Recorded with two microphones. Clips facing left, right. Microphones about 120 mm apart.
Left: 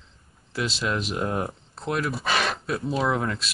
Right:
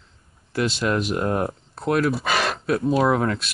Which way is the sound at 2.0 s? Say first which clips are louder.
Right 4 dB; centre (ahead or behind).